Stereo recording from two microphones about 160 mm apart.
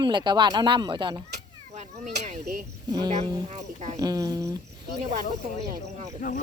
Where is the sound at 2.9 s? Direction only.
25° right (ahead or behind).